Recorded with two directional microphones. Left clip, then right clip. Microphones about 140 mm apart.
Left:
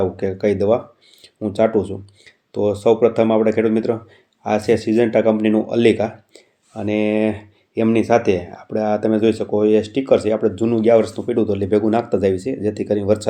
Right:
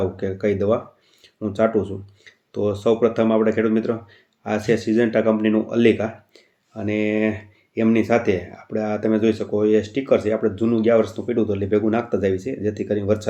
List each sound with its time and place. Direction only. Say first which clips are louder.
0.0 s speech: left 4 dB; 40° left (ahead or behind)